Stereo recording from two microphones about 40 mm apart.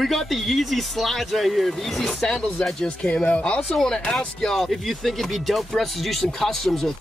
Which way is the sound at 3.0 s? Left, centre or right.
Left.